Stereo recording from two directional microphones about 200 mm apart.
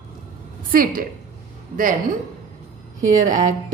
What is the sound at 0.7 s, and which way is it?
Speech, 45° right (ahead or behind).